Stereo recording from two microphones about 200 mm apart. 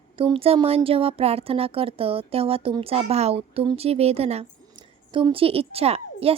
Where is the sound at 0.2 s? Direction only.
25° right (ahead or behind).